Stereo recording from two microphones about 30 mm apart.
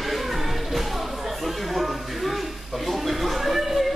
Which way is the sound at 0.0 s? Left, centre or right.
Centre.